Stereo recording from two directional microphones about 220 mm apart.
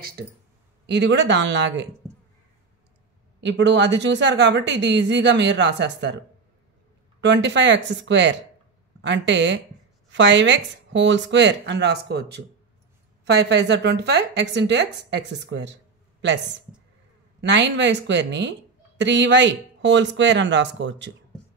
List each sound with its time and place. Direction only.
0.8 s a woman's voice: 50° right (ahead or behind)
3.3 s a woman's voice: 55° right (ahead or behind)
7.2 s a woman's voice: 55° right (ahead or behind)
17.4 s a woman's voice: 55° right (ahead or behind)